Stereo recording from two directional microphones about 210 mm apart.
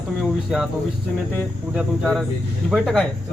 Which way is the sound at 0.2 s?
5° right (ahead or behind).